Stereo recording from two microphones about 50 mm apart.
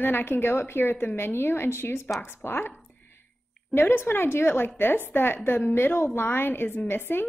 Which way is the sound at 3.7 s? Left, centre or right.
Left.